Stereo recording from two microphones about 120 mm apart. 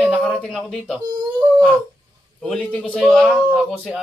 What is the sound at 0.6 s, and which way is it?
Speech, 5° left (ahead or behind).